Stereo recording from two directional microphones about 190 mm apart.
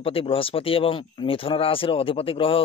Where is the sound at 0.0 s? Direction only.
30° left (ahead or behind).